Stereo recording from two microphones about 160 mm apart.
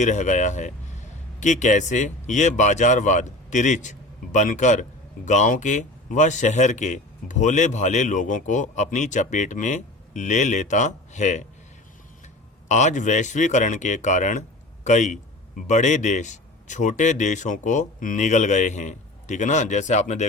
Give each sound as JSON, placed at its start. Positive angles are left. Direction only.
{"t": 0.0, "sound": "speech", "side_deg": 50}
{"t": 12.6, "sound": "speech", "side_deg": 45}